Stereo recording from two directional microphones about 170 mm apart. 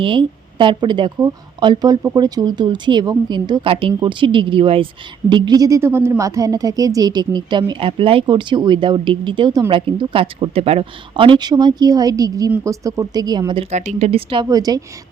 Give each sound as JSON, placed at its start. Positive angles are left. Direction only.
{"t": 0.0, "sound": "a woman's voice", "side_deg": -30}
{"t": 13.7, "sound": "a woman's voice", "side_deg": -40}